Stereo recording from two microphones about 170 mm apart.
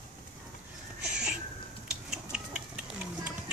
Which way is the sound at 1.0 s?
5° right (ahead or behind).